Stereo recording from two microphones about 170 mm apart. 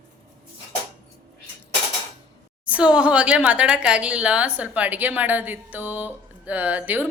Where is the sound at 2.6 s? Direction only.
5° right (ahead or behind).